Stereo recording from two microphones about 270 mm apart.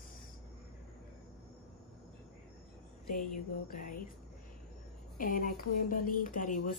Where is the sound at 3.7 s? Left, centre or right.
Left.